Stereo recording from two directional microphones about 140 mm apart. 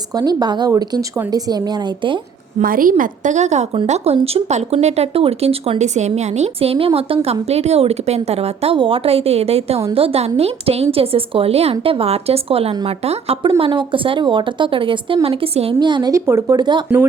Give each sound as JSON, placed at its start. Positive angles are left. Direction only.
{"t": 0.2, "sound": "speech", "side_deg": -30}
{"t": 2.6, "sound": "a woman's voice", "side_deg": -85}
{"t": 3.0, "sound": "a woman's voice", "side_deg": -60}